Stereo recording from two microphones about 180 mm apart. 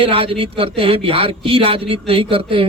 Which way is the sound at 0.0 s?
30° right (ahead or behind).